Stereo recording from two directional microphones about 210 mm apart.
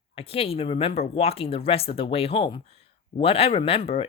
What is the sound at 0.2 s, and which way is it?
Speech, 30° left (ahead or behind).